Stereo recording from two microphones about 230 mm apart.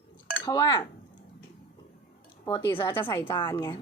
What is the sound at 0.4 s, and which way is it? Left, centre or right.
Speech, centre.